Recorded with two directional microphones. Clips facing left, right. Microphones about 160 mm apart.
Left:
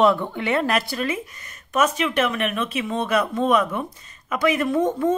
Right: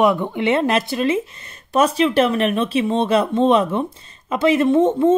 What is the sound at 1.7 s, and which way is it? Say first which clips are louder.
A woman's voice: right 5 dB; 30° right (ahead or behind).